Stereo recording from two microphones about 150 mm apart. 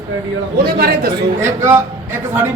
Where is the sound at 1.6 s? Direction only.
15° right (ahead or behind).